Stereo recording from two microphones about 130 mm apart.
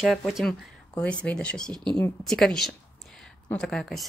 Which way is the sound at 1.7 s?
35° right (ahead or behind).